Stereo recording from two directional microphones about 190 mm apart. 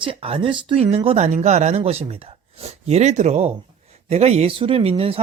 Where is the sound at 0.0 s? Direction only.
30° right (ahead or behind).